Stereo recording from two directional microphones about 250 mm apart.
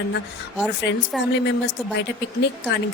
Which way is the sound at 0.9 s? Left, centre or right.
Left.